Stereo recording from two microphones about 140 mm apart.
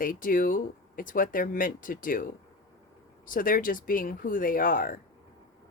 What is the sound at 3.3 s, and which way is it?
Speech, 80° left.